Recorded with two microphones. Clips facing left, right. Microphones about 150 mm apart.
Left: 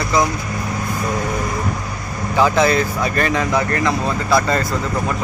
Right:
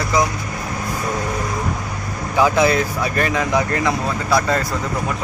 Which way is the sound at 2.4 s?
10° right (ahead or behind).